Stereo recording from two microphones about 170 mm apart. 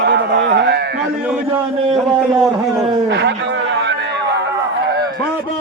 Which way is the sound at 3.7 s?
90° right.